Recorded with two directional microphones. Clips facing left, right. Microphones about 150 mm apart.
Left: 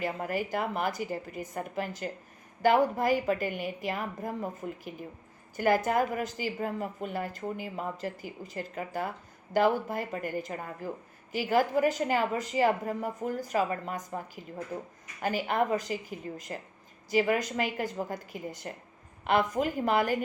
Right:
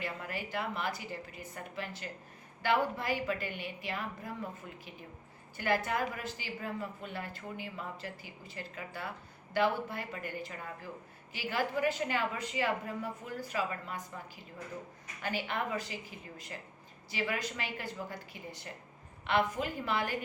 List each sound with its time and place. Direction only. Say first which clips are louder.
0.0 s speech: left 8 dB; 45° left (ahead or behind)